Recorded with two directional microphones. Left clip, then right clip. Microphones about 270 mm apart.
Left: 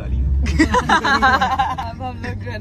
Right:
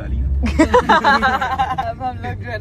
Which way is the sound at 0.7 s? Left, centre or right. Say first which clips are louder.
Right 4 dB; centre.